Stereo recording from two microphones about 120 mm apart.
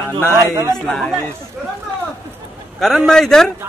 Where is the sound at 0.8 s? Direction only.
5° left (ahead or behind).